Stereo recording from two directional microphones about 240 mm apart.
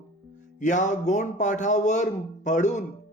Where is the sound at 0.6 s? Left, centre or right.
Left.